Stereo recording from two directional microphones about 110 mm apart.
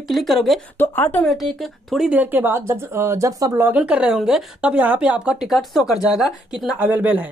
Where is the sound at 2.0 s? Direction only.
15° right (ahead or behind); by 3.5 s 30° right (ahead or behind).